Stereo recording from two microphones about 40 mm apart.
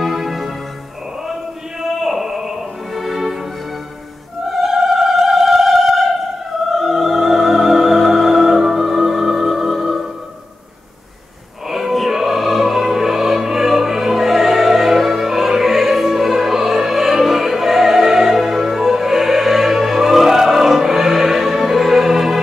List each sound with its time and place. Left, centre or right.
0.0 s music: centre
4.5 s opera: centre
4.7 s music: centre
6.7 s opera: centre
11.7 s music: centre